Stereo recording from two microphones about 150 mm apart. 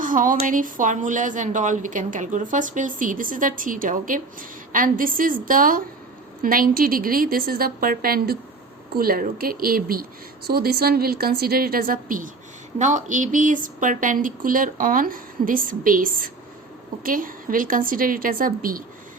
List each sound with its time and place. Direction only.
0.0 s a woman's voice: 65° right (ahead or behind)